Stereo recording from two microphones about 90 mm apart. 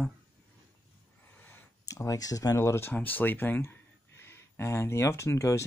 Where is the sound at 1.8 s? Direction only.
40° left (ahead or behind).